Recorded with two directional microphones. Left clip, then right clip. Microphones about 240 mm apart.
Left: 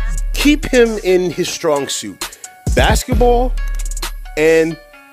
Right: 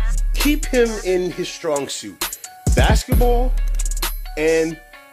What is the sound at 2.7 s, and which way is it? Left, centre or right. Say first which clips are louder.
Speech: left 5 dB; left.